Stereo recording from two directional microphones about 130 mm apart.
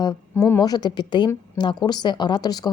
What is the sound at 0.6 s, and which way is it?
Speech, 30° left (ahead or behind).